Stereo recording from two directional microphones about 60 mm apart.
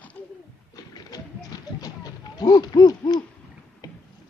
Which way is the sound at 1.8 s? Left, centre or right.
Left.